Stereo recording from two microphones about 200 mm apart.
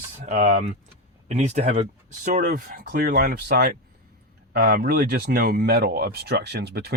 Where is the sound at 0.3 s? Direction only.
35° right (ahead or behind).